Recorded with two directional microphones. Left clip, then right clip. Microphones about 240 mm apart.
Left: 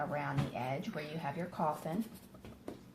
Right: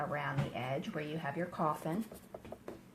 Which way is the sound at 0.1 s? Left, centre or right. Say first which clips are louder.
Even; right.